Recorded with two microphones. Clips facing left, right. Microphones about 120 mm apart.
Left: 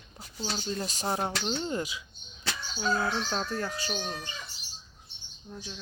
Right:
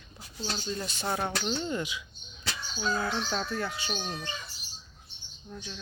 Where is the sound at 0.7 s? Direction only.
40° left (ahead or behind).